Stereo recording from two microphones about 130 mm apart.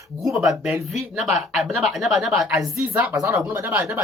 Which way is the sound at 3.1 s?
25° right (ahead or behind).